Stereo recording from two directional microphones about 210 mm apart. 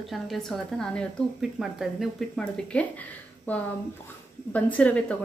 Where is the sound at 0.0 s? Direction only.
Centre (ahead or behind).